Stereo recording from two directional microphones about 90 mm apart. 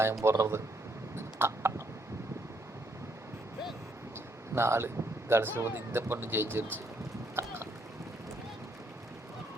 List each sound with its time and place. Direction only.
0.0 s speech: 30° right (ahead or behind)
1.1 s a sound: 25° right (ahead or behind)
4.5 s speech: 30° right (ahead or behind)
7.3 s boat: 25° right (ahead or behind)